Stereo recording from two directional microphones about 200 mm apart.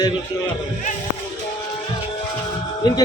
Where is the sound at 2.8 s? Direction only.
20° left (ahead or behind).